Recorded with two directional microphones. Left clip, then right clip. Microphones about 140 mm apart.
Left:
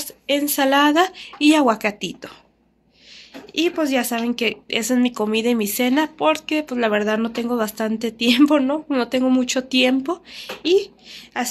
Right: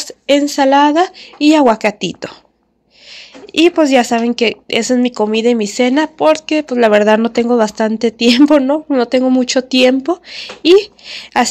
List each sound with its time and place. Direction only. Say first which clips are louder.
0.0 s a sound: right 9 dB; 50° right (ahead or behind)
0.5 s speech: right 4 dB; 25° right (ahead or behind)
10.3 s a woman's voice: right 9 dB; 55° right (ahead or behind)